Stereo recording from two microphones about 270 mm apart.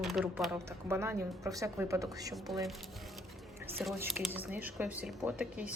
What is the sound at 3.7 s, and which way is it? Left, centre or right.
Speech, centre.